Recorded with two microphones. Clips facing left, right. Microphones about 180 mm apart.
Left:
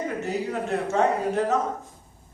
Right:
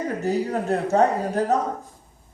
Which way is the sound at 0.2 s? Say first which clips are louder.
Right 4 dB; 35° right (ahead or behind).